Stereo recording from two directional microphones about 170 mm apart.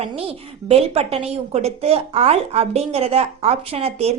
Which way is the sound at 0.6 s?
35° right (ahead or behind).